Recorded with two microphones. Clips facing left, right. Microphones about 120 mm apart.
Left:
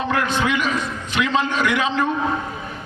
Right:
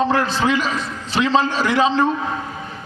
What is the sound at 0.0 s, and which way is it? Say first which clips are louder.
A man's voice: right 3 dB; 35° right (ahead or behind).